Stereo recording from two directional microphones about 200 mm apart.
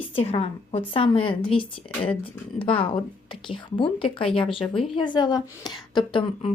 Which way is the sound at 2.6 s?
25° left (ahead or behind).